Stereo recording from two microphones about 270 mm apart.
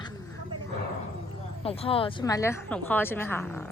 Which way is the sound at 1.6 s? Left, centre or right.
Left.